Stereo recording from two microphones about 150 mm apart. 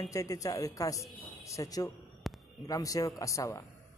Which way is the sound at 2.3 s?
Centre (ahead or behind).